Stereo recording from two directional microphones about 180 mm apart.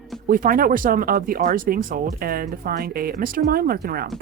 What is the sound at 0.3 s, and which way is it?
Speech, 50° right (ahead or behind).